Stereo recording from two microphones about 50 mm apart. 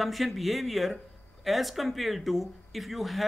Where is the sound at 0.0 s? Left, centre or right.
Centre.